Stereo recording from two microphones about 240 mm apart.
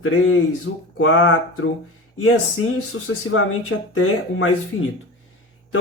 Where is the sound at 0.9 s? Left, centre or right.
Left.